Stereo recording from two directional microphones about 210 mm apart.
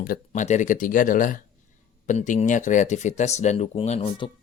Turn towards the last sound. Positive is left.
turn(degrees=25)  # may be behind; listen again after turning